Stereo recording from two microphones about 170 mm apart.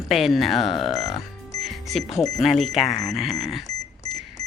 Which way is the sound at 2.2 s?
Centre (ahead or behind).